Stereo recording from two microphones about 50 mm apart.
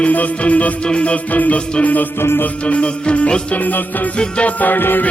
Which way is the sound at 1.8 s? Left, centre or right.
Left.